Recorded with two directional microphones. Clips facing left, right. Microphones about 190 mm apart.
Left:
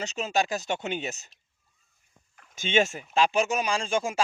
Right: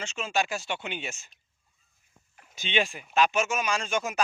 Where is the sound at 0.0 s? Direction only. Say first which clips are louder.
Left 2 dB; 40° left (ahead or behind).